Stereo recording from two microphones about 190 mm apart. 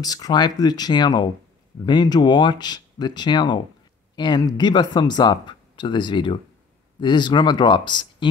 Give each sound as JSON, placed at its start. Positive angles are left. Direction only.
{"t": 0.0, "sound": "speech", "side_deg": 20}